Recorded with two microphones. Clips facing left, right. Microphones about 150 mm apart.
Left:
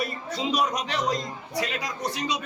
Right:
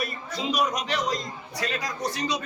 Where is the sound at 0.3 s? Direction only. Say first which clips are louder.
Even; 30° left (ahead or behind).